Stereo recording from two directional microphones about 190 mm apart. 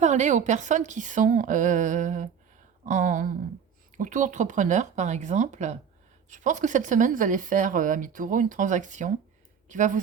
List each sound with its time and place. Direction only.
0.0 s a woman's voice: 40° right (ahead or behind)